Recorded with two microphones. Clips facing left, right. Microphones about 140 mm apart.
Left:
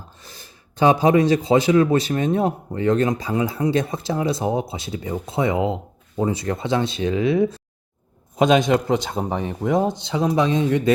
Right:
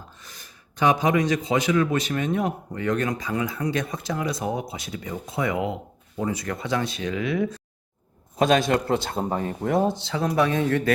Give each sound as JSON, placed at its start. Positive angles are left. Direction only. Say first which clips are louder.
{"t": 0.2, "sound": "a man's voice", "louder": "left 3 dB", "side_deg": 30}